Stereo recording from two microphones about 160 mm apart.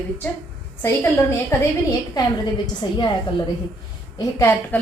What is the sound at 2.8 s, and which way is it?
Speech, 30° left (ahead or behind).